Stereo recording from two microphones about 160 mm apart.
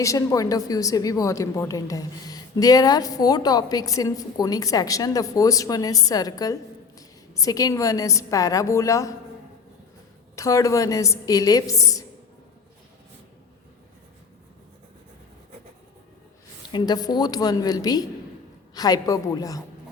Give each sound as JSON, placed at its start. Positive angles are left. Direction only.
{"t": 0.0, "sound": "a woman's voice", "side_deg": 20}
{"t": 10.3, "sound": "a woman's voice", "side_deg": 20}
{"t": 16.7, "sound": "a woman's voice", "side_deg": 25}